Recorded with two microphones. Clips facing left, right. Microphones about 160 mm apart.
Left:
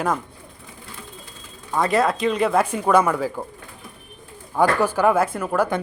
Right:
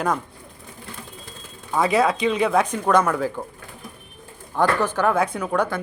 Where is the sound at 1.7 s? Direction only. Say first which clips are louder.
Even; centre (ahead or behind).